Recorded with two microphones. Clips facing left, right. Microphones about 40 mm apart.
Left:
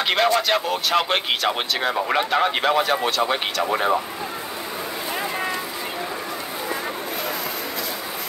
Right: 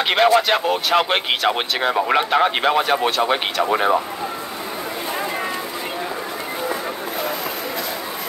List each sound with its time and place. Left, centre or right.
0.0 s speech: right